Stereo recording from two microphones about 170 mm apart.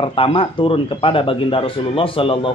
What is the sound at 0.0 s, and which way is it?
Speech, 30° left (ahead or behind).